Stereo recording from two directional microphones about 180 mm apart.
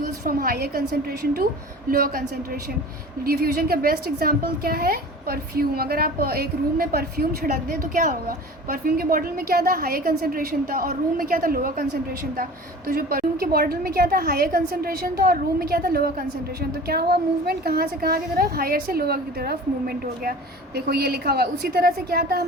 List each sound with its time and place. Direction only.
0.0 s a woman's voice: 55° right (ahead or behind)
3.2 s a woman's voice: 55° right (ahead or behind)
12.9 s a woman's voice: 55° right (ahead or behind)